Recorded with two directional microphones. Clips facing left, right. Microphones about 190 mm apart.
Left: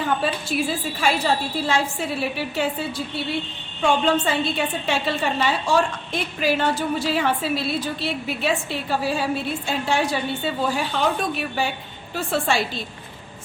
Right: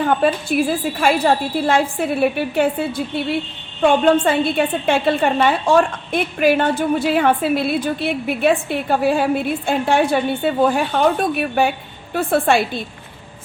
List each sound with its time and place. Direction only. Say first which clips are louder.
0.0 s a woman's voice: right 7 dB; 55° right (ahead or behind)